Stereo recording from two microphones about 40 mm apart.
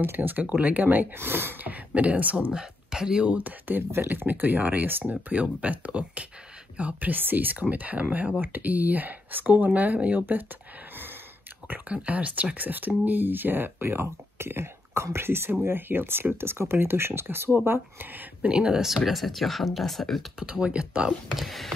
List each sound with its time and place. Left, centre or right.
0.0 s speech: right
1.1 s speech: right
1.7 s speech: right
2.5 s speech: centre
3.3 s speech: right
5.1 s speech: right
7.1 s speech: right
11.9 s speech: right
12.5 s speech: right
15.6 s speech: right
16.3 s speech: right
18.7 s speech: centre
20.4 s speech: right
21.4 s speech: centre